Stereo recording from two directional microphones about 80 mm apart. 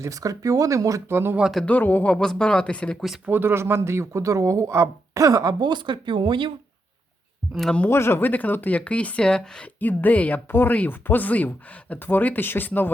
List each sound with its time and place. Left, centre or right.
0.0 s speech: right
1.0 s speech: right
1.4 s speech: centre
1.6 s speech: left
3.2 s speech: right
5.5 s speech: right
7.5 s speech: centre
7.9 s speech: left; by 9.6 s centre
9.8 s speech: left